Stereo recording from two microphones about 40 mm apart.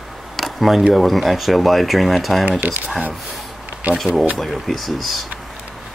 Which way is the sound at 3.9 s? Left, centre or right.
Right.